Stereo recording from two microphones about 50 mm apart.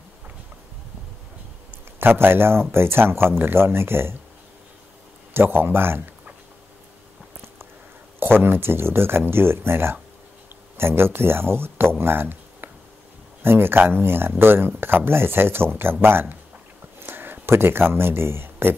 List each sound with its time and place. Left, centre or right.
2.0 s speech: right
5.3 s speech: right
8.2 s speech: right
12.0 s a sound: right
13.4 s speech: right